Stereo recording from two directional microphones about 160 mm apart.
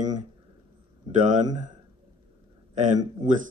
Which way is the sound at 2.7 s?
50° right (ahead or behind).